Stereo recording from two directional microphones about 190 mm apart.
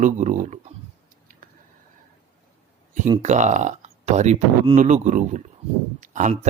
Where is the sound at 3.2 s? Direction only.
40° right (ahead or behind).